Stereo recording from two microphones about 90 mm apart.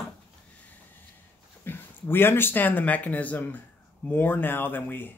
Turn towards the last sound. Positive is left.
turn(degrees=20)  # may be behind; listen again after turning